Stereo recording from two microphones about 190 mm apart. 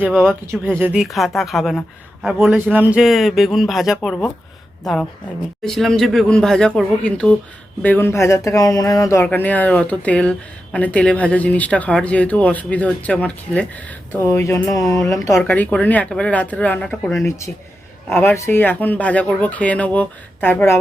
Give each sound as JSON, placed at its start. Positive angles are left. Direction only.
{"t": 0.1, "sound": "a man's voice", "side_deg": 5}
{"t": 0.8, "sound": "a man's voice", "side_deg": -5}
{"t": 5.6, "sound": "a man's voice", "side_deg": 0}